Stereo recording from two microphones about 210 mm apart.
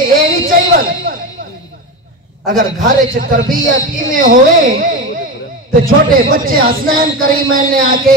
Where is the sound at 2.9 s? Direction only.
40° right (ahead or behind).